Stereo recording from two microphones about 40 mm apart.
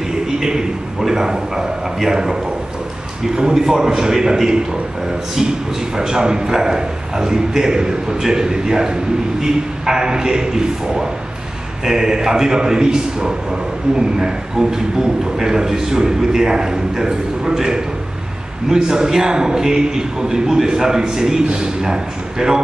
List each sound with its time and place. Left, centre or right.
0.4 s a man's voice: centre
3.3 s a man's voice: centre
5.9 s a man's voice: centre